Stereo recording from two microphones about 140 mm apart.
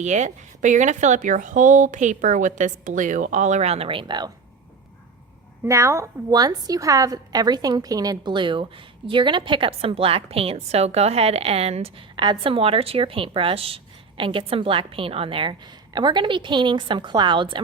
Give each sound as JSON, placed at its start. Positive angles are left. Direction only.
{"t": 0.0, "sound": "speech", "side_deg": -55}
{"t": 5.6, "sound": "a woman's voice", "side_deg": -20}